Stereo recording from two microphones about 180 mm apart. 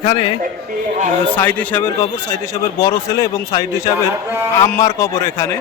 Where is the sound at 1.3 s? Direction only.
10° left (ahead or behind).